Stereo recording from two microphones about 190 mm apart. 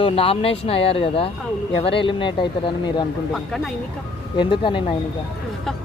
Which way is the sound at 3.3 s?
Centre (ahead or behind).